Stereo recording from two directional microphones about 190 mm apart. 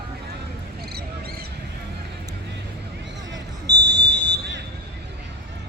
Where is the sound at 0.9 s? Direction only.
55° right (ahead or behind).